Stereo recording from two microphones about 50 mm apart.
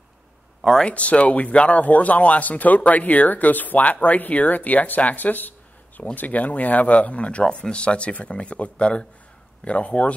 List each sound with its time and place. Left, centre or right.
0.8 s speech: left